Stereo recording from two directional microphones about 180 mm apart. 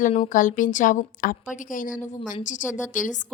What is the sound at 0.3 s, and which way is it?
A woman's voice, 45° left (ahead or behind).